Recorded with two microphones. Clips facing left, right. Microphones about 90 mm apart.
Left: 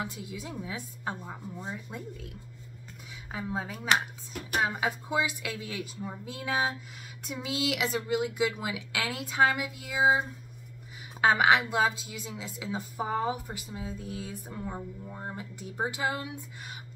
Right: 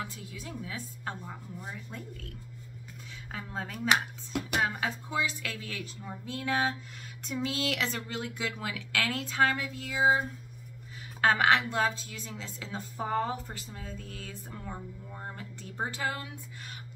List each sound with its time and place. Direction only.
0.0 s speech: 15° left (ahead or behind)